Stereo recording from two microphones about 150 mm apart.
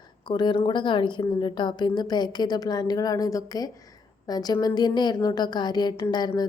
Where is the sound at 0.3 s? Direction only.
30° left (ahead or behind).